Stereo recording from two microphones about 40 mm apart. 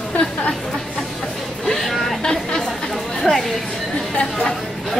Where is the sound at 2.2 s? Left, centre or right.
Centre.